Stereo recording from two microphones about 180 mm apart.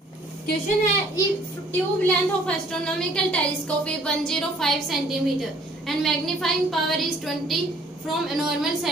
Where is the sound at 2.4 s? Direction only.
5° left (ahead or behind).